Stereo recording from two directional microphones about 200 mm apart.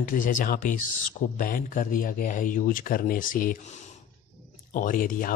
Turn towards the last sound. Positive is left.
turn(degrees=45)  # may be behind; listen again after turning